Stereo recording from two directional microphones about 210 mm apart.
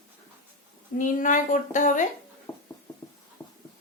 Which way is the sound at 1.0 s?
40° left (ahead or behind).